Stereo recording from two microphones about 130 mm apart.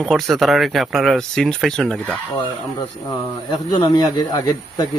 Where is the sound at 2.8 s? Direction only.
30° left (ahead or behind).